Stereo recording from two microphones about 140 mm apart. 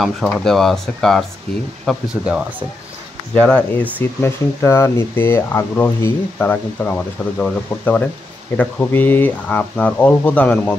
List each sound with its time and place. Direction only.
0.5 s speech: centre (ahead or behind)
3.3 s speech: 5° left (ahead or behind)
4.0 s speech: 15° left (ahead or behind)